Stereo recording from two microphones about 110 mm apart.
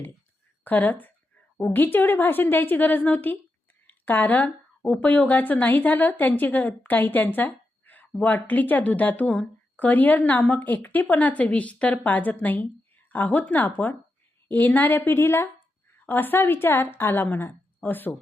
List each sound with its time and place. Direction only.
0.6 s a woman's voice: 15° left (ahead or behind)